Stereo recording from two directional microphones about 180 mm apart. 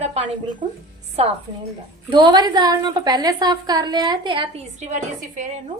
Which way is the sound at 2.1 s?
25° right (ahead or behind).